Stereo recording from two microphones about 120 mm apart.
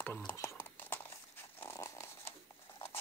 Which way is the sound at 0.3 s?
20° left (ahead or behind).